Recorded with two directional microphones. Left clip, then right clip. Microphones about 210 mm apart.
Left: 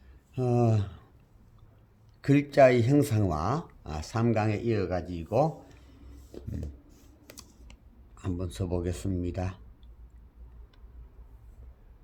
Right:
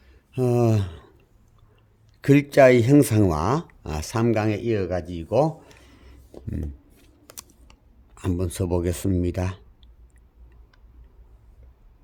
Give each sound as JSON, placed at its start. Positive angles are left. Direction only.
{"t": 0.3, "sound": "speech", "side_deg": -55}
{"t": 2.2, "sound": "speech", "side_deg": -50}
{"t": 7.3, "sound": "computer keyboard", "side_deg": -30}
{"t": 8.1, "sound": "speech", "side_deg": -55}